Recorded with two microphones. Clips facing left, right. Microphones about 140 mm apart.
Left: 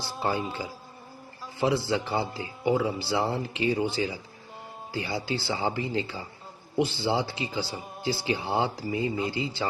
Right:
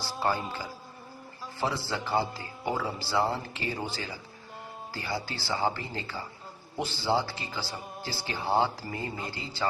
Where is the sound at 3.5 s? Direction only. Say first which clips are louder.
Left 8 dB; 20° left (ahead or behind).